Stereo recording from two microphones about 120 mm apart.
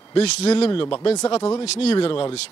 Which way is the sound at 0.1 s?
55° left (ahead or behind).